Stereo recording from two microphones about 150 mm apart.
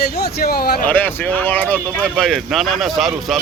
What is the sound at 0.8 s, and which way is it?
Speech, 10° left (ahead or behind).